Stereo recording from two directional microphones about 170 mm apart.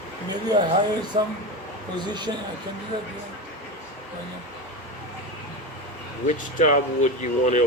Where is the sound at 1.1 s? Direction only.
35° right (ahead or behind).